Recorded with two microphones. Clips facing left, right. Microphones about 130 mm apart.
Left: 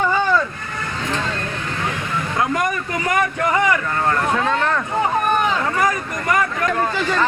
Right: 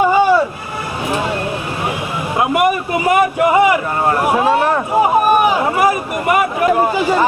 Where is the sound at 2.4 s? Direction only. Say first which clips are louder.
Right 7 dB; 10° right (ahead or behind).